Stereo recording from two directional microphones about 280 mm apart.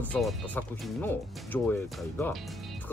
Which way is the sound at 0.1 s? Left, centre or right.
Centre.